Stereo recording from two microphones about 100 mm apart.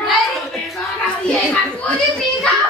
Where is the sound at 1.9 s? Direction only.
5° left (ahead or behind).